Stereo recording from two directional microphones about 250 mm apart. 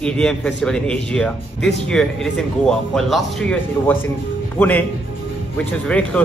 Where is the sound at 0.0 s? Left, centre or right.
Centre.